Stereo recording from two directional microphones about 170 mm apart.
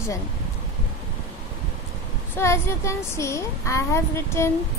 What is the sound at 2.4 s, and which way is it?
A woman's voice, 15° left (ahead or behind).